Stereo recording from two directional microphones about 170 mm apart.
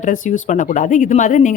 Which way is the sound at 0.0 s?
45° left (ahead or behind).